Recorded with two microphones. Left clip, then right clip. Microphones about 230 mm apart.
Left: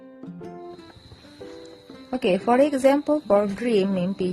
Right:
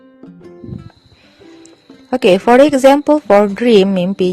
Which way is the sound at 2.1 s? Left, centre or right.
Right.